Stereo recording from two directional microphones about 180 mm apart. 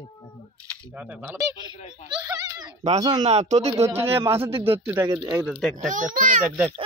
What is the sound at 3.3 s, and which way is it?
Speech, 40° right (ahead or behind).